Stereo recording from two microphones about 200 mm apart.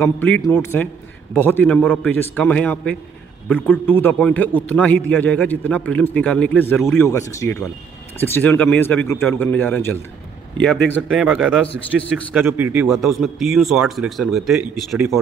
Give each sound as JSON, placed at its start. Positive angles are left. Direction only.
{"t": 0.0, "sound": "a man's voice", "side_deg": 10}